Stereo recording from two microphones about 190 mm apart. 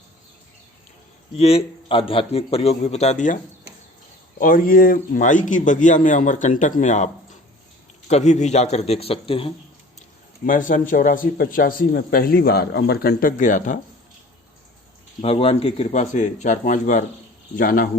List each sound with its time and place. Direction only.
1.3 s a man's voice: 30° left (ahead or behind)
4.4 s a man's voice: 45° left (ahead or behind); by 9.5 s 30° left (ahead or behind)
10.4 s speech: 45° left (ahead or behind)
15.2 s a man's voice: 30° left (ahead or behind); by 17.8 s 50° left (ahead or behind)